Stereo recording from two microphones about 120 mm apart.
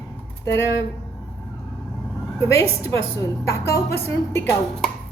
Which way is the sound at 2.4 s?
25° left (ahead or behind).